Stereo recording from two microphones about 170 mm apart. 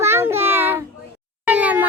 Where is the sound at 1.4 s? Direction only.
10° right (ahead or behind).